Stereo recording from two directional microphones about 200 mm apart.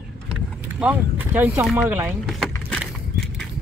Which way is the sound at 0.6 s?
10° right (ahead or behind).